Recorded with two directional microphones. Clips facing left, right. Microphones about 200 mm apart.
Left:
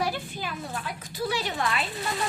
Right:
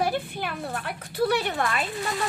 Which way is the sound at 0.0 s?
60° right (ahead or behind).